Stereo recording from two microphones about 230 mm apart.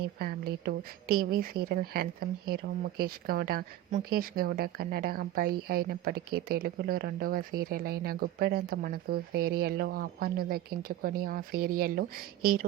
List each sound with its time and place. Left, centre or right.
0.0 s speech: right